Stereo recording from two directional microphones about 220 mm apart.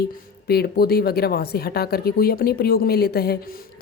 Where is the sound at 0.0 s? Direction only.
45° left (ahead or behind).